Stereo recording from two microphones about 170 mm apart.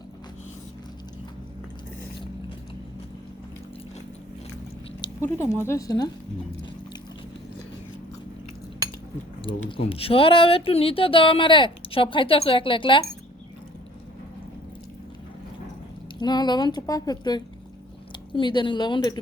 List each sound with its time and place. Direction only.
5.2 s speech: 15° left (ahead or behind)
9.5 s speech: 25° left (ahead or behind)
16.1 s speech: 25° left (ahead or behind)